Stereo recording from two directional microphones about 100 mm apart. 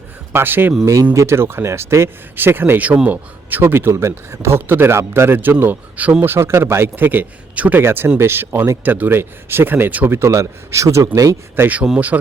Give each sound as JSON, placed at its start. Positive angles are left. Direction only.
{"t": 0.3, "sound": "speech", "side_deg": -20}